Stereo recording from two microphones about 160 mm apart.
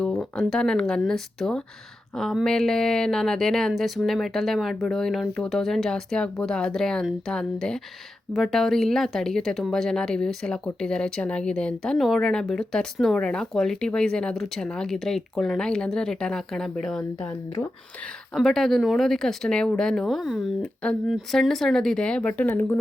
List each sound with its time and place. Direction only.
0.0 s speech: 5° left (ahead or behind)
18.3 s speech: centre (ahead or behind)